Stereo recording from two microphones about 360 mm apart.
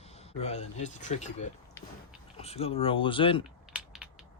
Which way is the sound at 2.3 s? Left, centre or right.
Centre.